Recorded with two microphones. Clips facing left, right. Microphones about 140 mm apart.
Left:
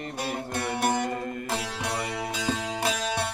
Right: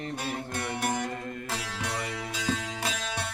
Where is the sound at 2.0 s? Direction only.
65° left (ahead or behind).